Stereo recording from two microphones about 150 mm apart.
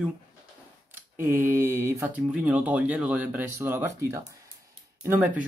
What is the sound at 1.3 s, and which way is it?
Speech, 15° right (ahead or behind).